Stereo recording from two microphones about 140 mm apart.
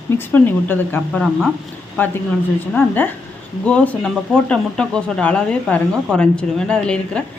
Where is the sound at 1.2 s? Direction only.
Centre (ahead or behind).